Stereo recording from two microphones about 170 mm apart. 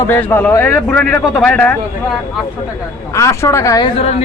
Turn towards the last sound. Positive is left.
turn(degrees=20)  # may be behind; listen again after turning